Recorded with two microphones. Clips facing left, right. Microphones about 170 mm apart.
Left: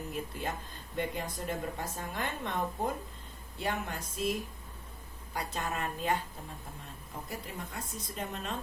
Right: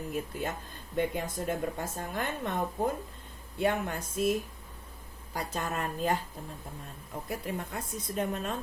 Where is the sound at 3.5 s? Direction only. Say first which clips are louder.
Right 6 dB; 55° right (ahead or behind).